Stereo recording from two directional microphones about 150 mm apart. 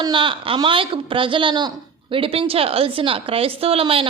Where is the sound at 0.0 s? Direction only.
35° right (ahead or behind).